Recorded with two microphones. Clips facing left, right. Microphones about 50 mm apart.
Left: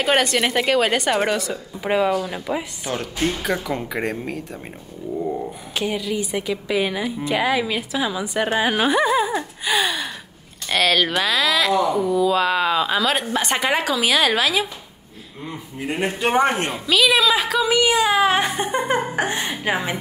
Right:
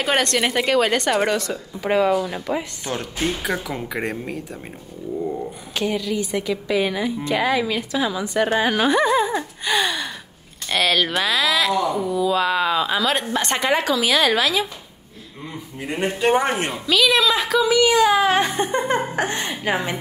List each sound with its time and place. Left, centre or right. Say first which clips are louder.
0.0 s a woman's voice: left 1 dB; centre
15.8 s a woman's voice: right 1 dB; centre
17.6 s speech: right 2 dB; left
18.0 s a woman's voice: right 1 dB; centre